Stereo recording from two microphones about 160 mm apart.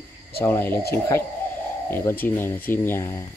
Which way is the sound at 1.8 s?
15° left (ahead or behind).